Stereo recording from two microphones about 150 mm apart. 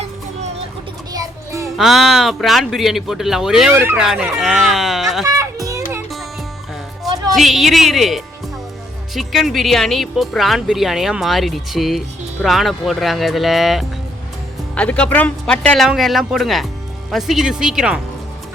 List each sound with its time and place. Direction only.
1.1 s music: 20° right (ahead or behind)
1.8 s speech: centre (ahead or behind)
3.8 s speech: 15° right (ahead or behind)
4.0 s speech: 5° right (ahead or behind)
5.2 s speech: 20° right (ahead or behind)
7.3 s speech: centre (ahead or behind)